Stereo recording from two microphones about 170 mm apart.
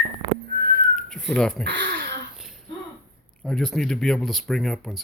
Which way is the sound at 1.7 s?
85° right.